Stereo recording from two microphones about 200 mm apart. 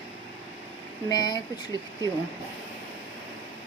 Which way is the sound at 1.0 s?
20° left (ahead or behind).